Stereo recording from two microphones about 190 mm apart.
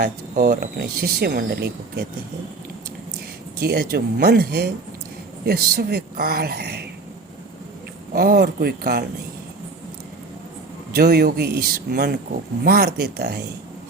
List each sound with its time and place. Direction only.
0.0 s speech: 50° right (ahead or behind)
3.6 s speech: 55° right (ahead or behind)
8.1 s speech: 50° right (ahead or behind)
10.9 s speech: 55° right (ahead or behind)